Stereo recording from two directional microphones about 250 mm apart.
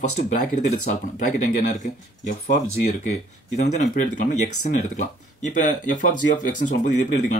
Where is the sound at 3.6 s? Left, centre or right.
Left.